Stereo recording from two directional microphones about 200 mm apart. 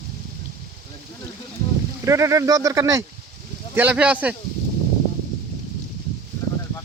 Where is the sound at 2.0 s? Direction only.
15° right (ahead or behind).